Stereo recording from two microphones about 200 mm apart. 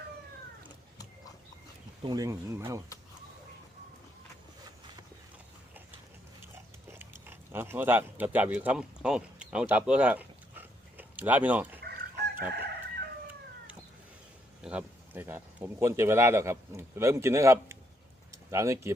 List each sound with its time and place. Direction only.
2.0 s speech: 15° right (ahead or behind)
6.9 s speech: 10° right (ahead or behind)
12.4 s chicken: 50° right (ahead or behind)
14.6 s speech: 5° right (ahead or behind)